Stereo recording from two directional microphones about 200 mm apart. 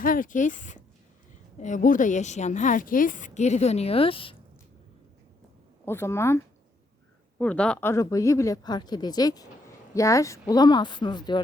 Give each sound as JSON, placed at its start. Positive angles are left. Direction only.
{"t": 0.0, "sound": "a woman's voice", "side_deg": 45}
{"t": 5.8, "sound": "speech", "side_deg": 10}